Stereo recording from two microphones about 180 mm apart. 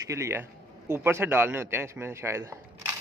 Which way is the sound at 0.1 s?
15° right (ahead or behind).